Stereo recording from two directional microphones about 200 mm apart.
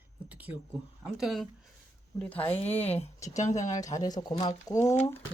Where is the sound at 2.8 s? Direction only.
30° left (ahead or behind).